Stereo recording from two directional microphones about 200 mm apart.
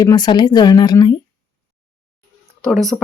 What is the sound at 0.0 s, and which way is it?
A woman's voice, 20° left (ahead or behind).